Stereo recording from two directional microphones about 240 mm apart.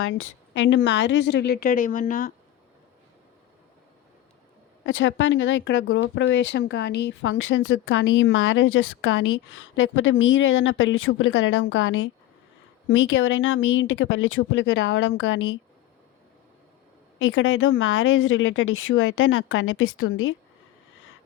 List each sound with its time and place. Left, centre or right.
0.0 s a woman's voice: left
4.9 s speech: left
17.2 s speech: left